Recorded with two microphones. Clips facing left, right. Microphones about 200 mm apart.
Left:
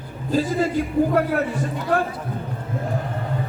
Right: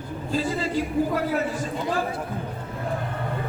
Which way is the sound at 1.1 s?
60° left (ahead or behind).